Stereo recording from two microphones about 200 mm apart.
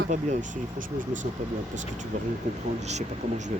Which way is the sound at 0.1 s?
35° right (ahead or behind).